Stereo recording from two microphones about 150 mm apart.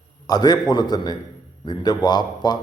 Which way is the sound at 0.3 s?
25° left (ahead or behind).